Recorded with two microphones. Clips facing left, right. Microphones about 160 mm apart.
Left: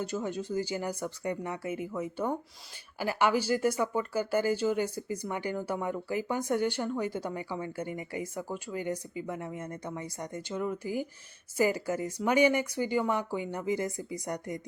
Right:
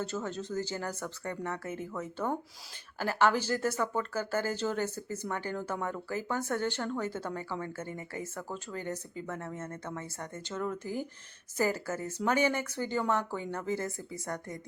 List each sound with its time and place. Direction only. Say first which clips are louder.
0.0 s speech: left 2 dB; 10° left (ahead or behind)